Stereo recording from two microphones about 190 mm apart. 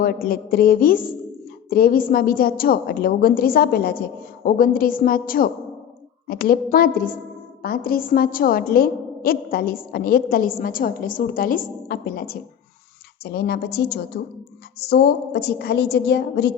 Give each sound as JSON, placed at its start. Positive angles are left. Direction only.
{"t": 0.0, "sound": "a woman's voice", "side_deg": 50}